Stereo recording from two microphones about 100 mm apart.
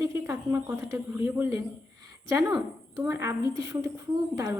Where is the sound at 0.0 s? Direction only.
30° right (ahead or behind).